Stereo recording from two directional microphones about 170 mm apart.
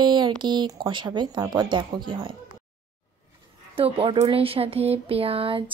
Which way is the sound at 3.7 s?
35° right (ahead or behind).